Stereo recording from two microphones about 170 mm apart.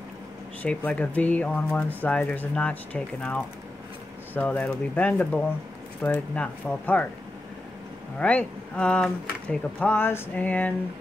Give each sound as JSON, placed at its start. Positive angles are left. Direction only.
{"t": 0.6, "sound": "speech", "side_deg": 10}
{"t": 8.2, "sound": "speech", "side_deg": 5}